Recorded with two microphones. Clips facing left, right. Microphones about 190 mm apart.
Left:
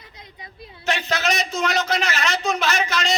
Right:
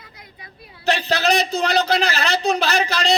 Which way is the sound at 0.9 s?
35° right (ahead or behind).